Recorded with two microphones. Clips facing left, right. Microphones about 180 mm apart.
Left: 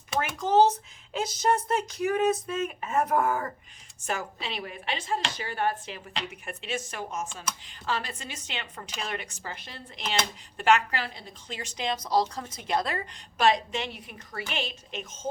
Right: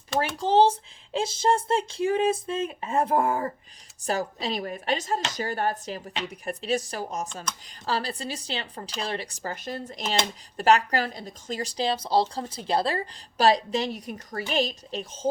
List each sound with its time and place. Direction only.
0.3 s a woman's voice: 30° right (ahead or behind)